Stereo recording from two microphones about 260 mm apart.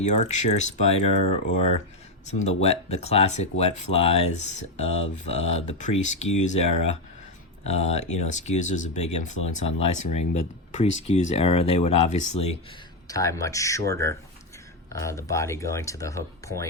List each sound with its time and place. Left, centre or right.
0.0 s speech: left
13.1 s speech: centre